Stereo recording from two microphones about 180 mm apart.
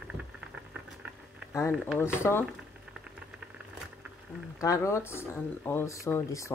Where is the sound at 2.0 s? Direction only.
15° left (ahead or behind).